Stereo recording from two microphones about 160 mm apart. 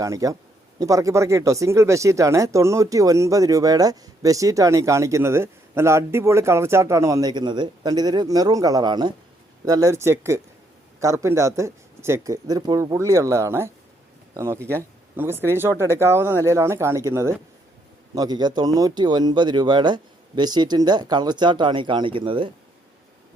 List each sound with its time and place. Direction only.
0.0 s speech: 20° right (ahead or behind)